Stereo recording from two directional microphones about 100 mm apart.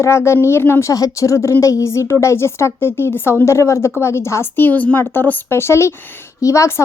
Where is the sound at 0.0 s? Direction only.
25° left (ahead or behind).